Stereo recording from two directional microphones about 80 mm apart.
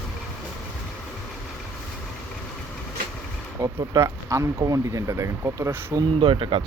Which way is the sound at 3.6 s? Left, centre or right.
Right.